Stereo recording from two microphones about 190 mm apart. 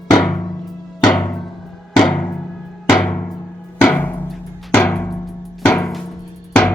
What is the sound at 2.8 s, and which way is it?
Music, 5° left (ahead or behind).